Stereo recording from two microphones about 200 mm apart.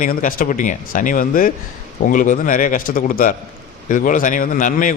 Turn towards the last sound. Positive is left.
turn(degrees=40)  # may be behind; listen again after turning